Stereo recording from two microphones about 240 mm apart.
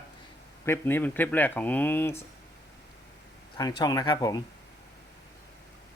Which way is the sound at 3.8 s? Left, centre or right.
Centre.